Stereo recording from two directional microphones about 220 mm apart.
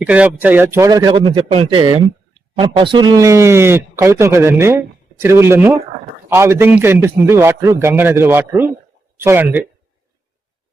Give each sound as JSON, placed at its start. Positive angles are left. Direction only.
{"t": 0.0, "sound": "speech", "side_deg": -5}